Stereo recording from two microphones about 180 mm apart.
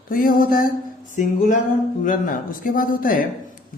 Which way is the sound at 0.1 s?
50° left (ahead or behind).